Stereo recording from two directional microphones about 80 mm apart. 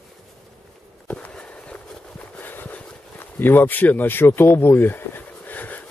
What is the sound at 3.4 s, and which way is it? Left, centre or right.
Speech, left.